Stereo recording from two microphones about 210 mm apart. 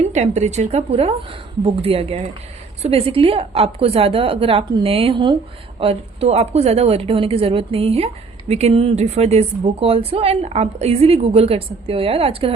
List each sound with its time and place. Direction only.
0.0 s a woman's voice: 30° right (ahead or behind)